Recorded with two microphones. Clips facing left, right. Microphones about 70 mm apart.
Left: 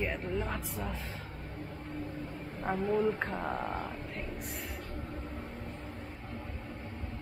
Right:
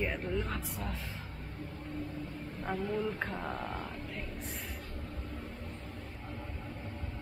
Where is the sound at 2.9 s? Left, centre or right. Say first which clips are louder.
Left 5 dB; left.